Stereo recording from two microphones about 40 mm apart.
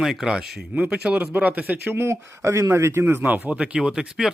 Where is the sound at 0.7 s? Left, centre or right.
Right.